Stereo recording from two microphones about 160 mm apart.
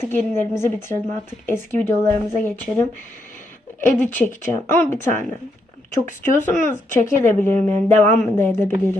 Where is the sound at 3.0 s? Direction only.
55° left (ahead or behind).